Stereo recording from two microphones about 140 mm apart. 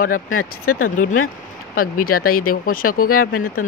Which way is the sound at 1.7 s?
90° left.